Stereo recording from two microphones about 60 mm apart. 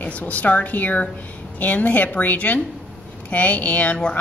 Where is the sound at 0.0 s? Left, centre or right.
Left.